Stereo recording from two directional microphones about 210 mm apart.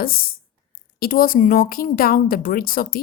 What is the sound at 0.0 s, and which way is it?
Speech, 45° left (ahead or behind).